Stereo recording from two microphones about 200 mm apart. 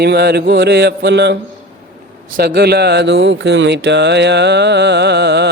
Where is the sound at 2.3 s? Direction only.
55° right (ahead or behind).